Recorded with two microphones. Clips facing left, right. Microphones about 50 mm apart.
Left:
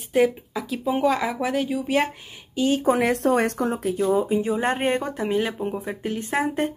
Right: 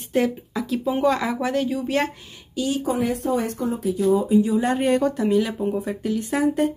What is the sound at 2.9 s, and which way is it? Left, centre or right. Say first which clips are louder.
Speech: left 3 dB; left.